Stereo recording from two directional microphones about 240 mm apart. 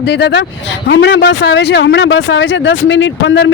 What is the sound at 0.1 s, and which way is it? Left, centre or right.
Speech, left.